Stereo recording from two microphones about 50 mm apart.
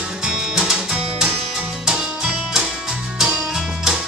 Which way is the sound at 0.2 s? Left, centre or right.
Centre.